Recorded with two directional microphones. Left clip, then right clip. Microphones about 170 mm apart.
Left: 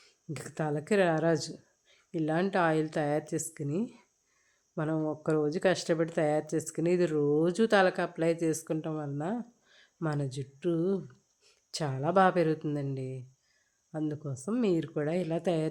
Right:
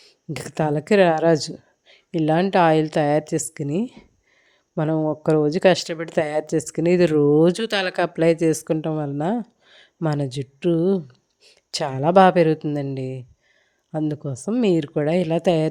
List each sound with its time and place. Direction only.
0.0 s speech: 35° right (ahead or behind)